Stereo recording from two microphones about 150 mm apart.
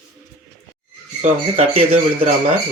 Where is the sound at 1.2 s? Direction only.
40° right (ahead or behind).